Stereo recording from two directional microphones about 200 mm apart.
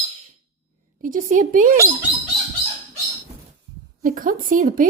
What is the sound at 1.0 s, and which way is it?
Speech, 40° right (ahead or behind).